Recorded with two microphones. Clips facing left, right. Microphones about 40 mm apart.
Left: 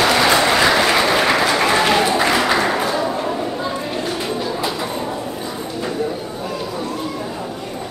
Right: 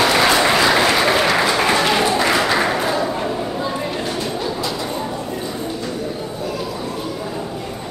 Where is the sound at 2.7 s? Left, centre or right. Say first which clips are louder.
Even; centre.